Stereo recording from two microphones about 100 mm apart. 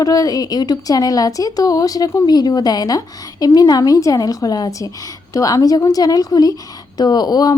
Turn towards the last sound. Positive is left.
turn(degrees=40)  # may be behind; listen again after turning